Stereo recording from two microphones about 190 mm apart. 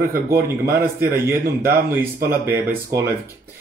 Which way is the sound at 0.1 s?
15° right (ahead or behind).